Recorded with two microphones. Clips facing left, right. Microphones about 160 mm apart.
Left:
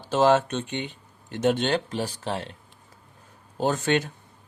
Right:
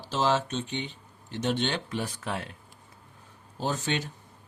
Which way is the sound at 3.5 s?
55° left (ahead or behind).